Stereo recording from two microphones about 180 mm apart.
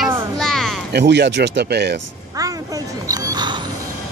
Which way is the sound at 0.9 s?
70° right (ahead or behind).